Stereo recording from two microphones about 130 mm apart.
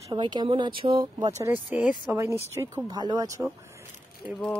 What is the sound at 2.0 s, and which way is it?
Speech, 20° right (ahead or behind).